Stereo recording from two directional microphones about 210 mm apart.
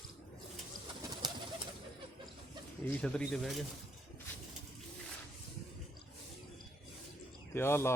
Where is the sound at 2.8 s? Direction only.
5° left (ahead or behind).